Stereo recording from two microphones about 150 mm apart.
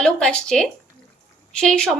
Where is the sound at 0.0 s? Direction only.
5° left (ahead or behind).